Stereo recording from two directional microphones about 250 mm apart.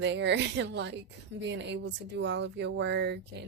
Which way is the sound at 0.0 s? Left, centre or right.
Right.